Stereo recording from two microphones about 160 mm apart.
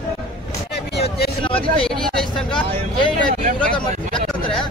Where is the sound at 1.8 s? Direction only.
5° left (ahead or behind).